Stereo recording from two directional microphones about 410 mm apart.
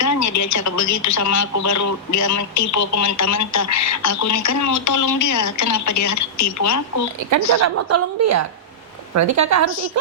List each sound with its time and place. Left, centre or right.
0.0 s speech: left
7.2 s a woman's voice: right